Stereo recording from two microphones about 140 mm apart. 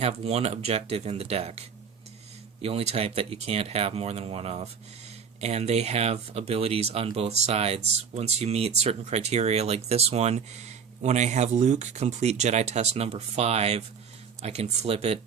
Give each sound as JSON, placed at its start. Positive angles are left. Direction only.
{"t": 0.0, "sound": "speech", "side_deg": -50}